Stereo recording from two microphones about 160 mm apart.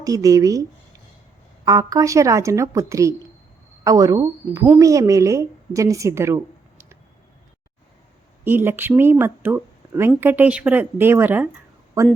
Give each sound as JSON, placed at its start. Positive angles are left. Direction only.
{"t": 0.0, "sound": "a woman's voice", "side_deg": -20}
{"t": 8.4, "sound": "a woman's voice", "side_deg": -15}